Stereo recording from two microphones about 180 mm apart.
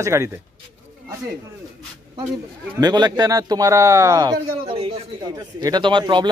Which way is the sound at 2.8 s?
25° right (ahead or behind).